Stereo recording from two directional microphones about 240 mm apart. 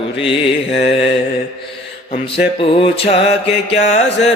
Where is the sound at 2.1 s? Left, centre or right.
Left.